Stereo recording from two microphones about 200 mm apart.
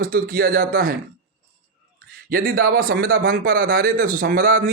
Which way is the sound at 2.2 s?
45° right (ahead or behind).